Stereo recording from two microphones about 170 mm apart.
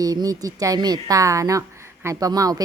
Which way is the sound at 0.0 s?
20° right (ahead or behind).